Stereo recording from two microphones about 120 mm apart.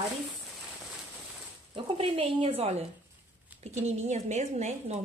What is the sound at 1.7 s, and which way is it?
Speech, 50° right (ahead or behind).